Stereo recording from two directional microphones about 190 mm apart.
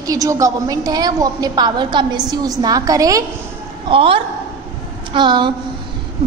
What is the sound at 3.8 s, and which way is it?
A woman's voice, 30° right (ahead or behind).